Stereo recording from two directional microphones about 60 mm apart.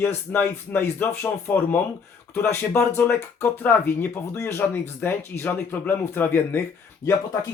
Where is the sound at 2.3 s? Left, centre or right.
Left.